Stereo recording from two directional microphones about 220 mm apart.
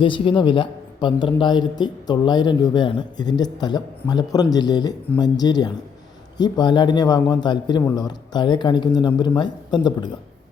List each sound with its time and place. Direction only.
0.0 s a man's voice: 25° left (ahead or behind)